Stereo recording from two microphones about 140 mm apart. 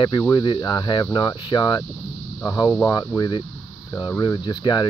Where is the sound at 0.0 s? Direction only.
30° left (ahead or behind).